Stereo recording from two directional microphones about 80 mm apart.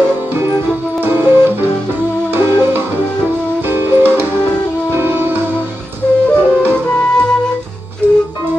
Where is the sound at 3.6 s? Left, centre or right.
Right.